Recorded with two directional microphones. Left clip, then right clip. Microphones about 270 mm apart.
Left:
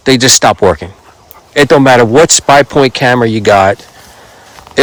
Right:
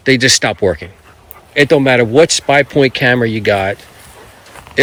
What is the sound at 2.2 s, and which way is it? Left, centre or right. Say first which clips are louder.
Speech: left 5 dB; left.